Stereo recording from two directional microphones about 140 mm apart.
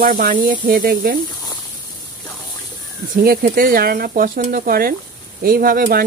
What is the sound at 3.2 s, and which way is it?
Speech, 90° right.